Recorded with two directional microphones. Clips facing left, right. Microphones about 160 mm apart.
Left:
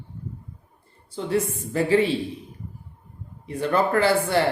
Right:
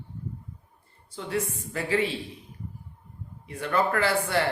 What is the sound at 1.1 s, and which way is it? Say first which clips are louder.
Speech: left 6 dB; 30° left (ahead or behind).